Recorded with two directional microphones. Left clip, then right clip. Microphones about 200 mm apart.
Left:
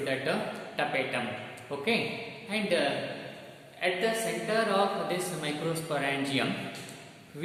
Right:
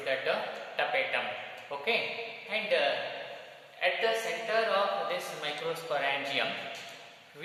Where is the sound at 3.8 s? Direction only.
Centre (ahead or behind).